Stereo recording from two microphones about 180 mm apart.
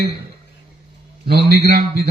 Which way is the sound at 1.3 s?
60° right (ahead or behind).